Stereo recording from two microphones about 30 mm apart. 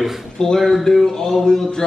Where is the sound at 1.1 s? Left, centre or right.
Left.